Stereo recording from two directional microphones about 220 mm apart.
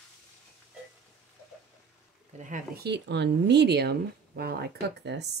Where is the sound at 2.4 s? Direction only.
40° right (ahead or behind).